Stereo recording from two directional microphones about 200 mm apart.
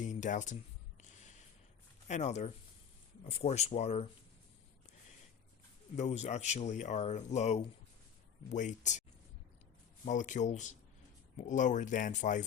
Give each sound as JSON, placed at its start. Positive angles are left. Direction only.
{"t": 0.0, "sound": "speech", "side_deg": 40}
{"t": 2.0, "sound": "speech", "side_deg": 35}
{"t": 6.0, "sound": "speech", "side_deg": 35}
{"t": 10.1, "sound": "speech", "side_deg": 40}